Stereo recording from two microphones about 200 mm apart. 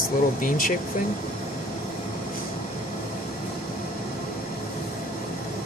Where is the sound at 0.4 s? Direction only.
45° left (ahead or behind).